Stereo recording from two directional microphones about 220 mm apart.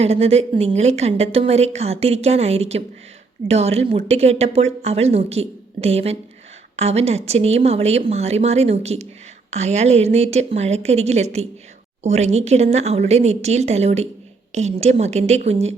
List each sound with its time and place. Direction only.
0.0 s a woman's voice: 30° right (ahead or behind)